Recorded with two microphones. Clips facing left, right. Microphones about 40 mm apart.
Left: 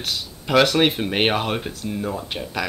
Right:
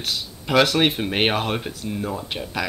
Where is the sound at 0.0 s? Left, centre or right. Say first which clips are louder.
Even; centre.